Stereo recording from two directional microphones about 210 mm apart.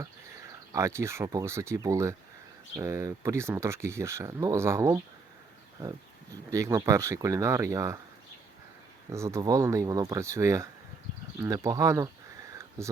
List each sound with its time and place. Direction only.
0.0 s speech: 15° right (ahead or behind)
9.0 s speech: 15° right (ahead or behind)
11.3 s a sound: 15° right (ahead or behind)